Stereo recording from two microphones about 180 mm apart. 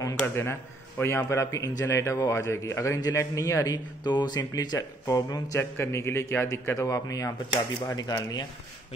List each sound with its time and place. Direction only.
0.0 s a man's voice: 15° left (ahead or behind)